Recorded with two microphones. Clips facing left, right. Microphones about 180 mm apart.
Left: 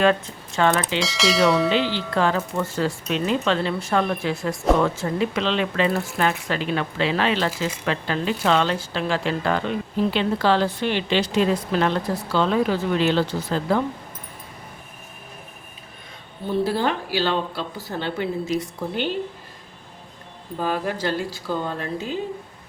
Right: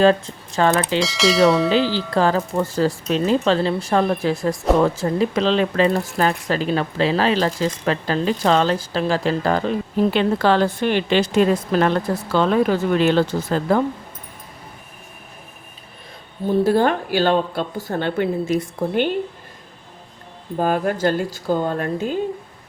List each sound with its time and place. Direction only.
0.0 s speech: 35° right (ahead or behind)
0.9 s speech: centre (ahead or behind)
2.1 s speech: 35° right (ahead or behind)
10.2 s a woman's voice: 50° right (ahead or behind)
16.5 s a woman's voice: 50° right (ahead or behind)
20.6 s a woman's voice: 50° right (ahead or behind)